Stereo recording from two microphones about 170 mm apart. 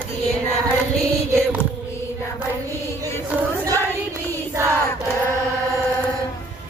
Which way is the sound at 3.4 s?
20° right (ahead or behind).